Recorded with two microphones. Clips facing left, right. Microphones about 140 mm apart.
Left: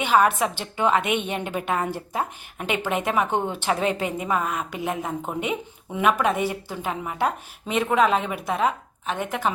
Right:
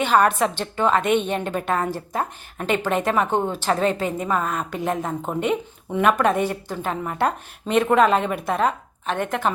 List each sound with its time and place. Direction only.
0.0 s a woman's voice: 10° left (ahead or behind)